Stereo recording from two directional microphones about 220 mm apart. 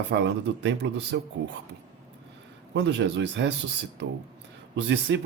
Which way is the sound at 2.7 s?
50° right (ahead or behind).